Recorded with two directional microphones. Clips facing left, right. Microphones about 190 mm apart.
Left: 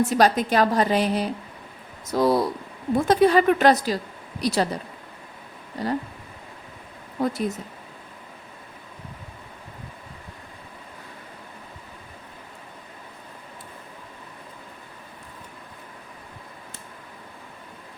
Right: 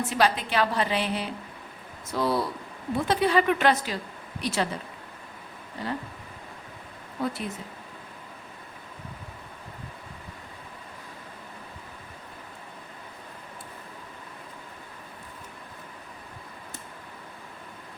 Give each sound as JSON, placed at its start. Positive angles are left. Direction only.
{"t": 0.1, "sound": "a woman's voice", "side_deg": 40}
{"t": 7.2, "sound": "speech", "side_deg": 40}